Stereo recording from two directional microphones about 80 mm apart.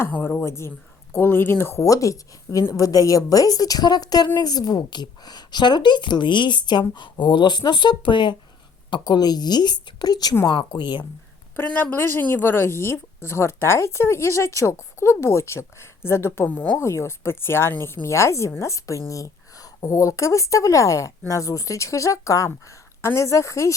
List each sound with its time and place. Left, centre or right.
0.1 s a woman's voice: left
8.9 s a woman's voice: left
10.4 s speech: left
11.5 s speech: left